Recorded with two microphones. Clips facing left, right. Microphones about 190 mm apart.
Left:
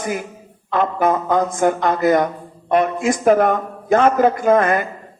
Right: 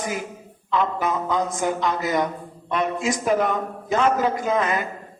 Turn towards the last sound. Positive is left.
turn(degrees=55)  # may be behind; listen again after turning